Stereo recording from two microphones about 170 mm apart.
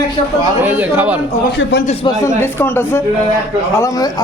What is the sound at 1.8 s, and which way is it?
Speech, 40° left (ahead or behind).